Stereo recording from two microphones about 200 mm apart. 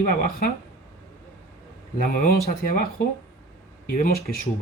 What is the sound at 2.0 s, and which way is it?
Speech, 45° left (ahead or behind).